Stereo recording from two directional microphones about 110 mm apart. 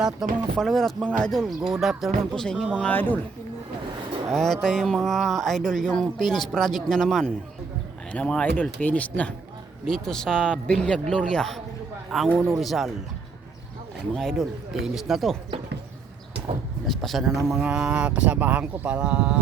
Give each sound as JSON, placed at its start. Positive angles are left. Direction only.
{"t": 0.0, "sound": "speech", "side_deg": 0}
{"t": 2.8, "sound": "speech", "side_deg": 15}
{"t": 4.3, "sound": "speech", "side_deg": 5}
{"t": 14.1, "sound": "speech", "side_deg": 5}
{"t": 16.8, "sound": "speech", "side_deg": 0}